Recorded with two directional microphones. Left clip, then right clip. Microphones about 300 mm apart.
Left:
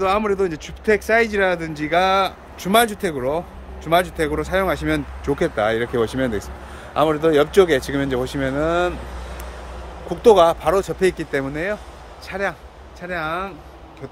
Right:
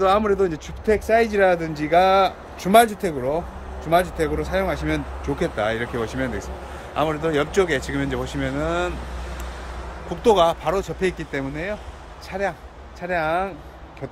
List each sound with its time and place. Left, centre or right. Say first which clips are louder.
0.0 s speech: right 1 dB; centre
10.0 s speech: left 4 dB; centre